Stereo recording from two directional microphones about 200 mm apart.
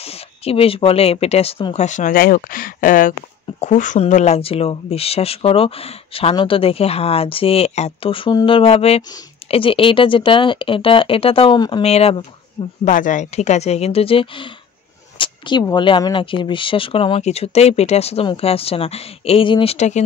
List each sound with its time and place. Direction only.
0.0 s speech: 30° left (ahead or behind)